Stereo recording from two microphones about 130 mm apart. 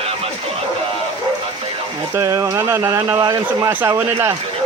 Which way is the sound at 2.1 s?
25° right (ahead or behind).